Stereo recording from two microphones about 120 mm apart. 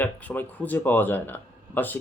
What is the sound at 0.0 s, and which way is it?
Speech, 15° left (ahead or behind).